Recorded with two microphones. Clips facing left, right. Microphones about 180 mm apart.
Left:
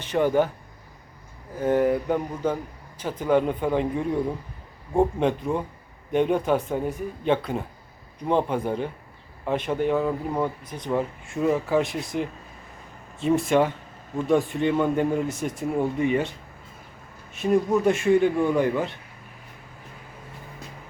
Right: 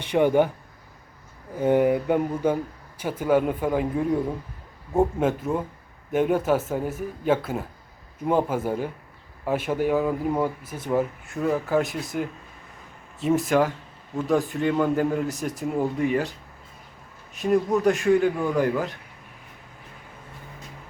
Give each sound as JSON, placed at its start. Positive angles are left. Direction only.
{"t": 0.0, "sound": "speech", "side_deg": -15}
{"t": 1.5, "sound": "speech", "side_deg": -15}
{"t": 17.3, "sound": "speech", "side_deg": 0}